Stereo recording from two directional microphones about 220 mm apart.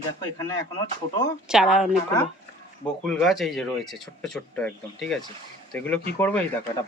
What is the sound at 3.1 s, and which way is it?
Speech, centre (ahead or behind).